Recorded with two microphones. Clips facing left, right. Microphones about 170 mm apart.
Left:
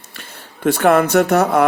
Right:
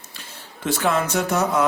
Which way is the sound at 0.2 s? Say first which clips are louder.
Left 8 dB; 60° left (ahead or behind).